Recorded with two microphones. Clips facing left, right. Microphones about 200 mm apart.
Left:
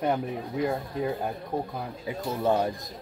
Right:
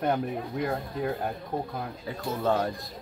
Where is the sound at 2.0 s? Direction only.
15° left (ahead or behind).